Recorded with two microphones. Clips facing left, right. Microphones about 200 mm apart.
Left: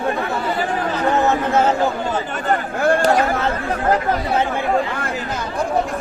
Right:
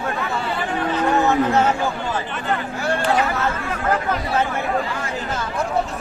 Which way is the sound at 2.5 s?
50° left (ahead or behind).